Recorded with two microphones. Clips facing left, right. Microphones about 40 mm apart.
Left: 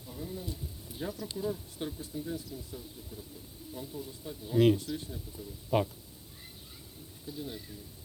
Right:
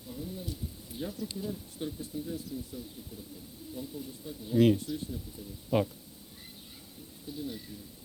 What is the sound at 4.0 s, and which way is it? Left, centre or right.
Speech, centre.